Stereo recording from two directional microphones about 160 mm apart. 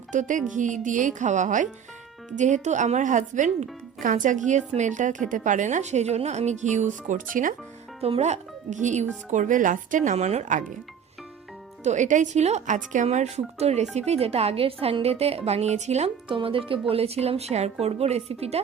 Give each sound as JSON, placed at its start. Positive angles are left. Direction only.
{"t": 0.1, "sound": "speech", "side_deg": -50}
{"t": 8.0, "sound": "speech", "side_deg": -40}
{"t": 11.8, "sound": "a woman's voice", "side_deg": -50}